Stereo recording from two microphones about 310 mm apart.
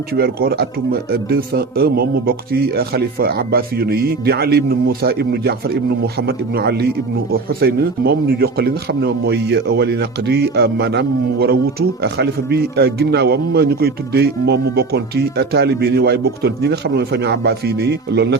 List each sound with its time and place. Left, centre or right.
0.1 s a man's voice: right